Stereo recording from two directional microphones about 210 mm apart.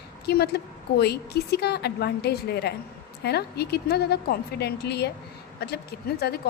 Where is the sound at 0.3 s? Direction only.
50° left (ahead or behind).